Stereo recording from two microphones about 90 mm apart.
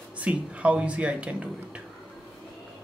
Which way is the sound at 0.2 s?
15° right (ahead or behind).